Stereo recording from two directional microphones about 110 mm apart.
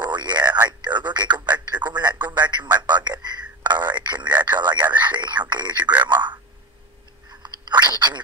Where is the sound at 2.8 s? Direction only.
40° right (ahead or behind).